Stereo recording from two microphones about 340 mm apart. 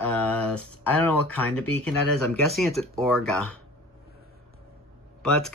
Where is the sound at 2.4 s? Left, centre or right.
Centre.